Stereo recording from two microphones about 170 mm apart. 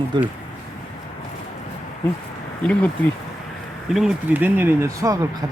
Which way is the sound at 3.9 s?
5° right (ahead or behind).